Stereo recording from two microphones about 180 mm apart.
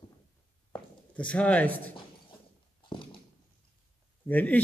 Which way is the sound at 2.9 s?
25° left (ahead or behind).